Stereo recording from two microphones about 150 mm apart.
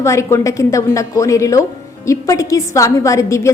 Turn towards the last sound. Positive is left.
turn(degrees=20)  # may be behind; listen again after turning